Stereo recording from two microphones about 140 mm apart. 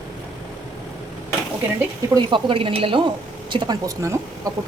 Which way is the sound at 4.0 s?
20° right (ahead or behind).